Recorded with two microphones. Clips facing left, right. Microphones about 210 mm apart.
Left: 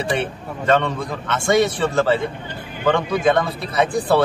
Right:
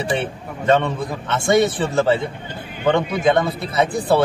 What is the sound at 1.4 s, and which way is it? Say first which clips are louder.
A man's voice: right 1 dB; 20° right (ahead or behind).